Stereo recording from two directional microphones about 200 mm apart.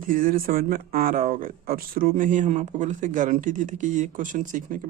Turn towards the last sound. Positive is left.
turn(degrees=-40)  # may be behind; listen again after turning